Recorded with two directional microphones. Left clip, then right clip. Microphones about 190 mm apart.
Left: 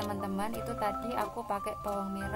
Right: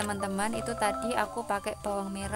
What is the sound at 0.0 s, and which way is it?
Speech, 30° right (ahead or behind).